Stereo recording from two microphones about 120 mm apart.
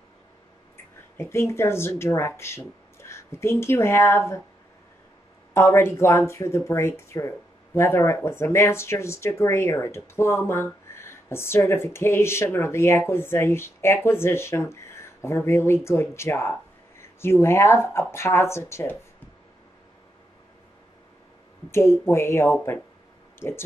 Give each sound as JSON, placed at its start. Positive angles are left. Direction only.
{"t": 1.1, "sound": "speech", "side_deg": 20}
{"t": 5.5, "sound": "speech", "side_deg": 20}
{"t": 21.6, "sound": "speech", "side_deg": 20}